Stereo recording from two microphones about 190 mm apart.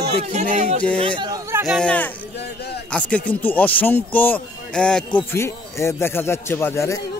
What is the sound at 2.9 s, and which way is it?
A man's voice, 5° left (ahead or behind).